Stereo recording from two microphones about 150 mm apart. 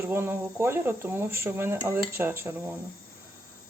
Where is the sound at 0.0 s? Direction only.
15° right (ahead or behind).